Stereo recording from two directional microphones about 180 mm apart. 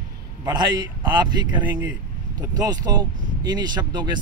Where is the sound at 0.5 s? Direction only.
25° right (ahead or behind).